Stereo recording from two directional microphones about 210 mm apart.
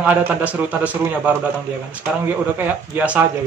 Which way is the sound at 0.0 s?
5° right (ahead or behind).